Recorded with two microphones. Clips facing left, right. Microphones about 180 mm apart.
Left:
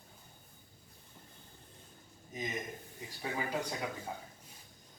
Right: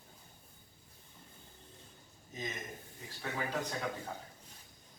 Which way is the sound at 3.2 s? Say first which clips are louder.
Left 1 dB; 10° left (ahead or behind).